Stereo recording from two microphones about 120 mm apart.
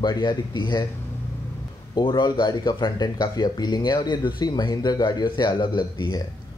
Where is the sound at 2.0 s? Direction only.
40° left (ahead or behind).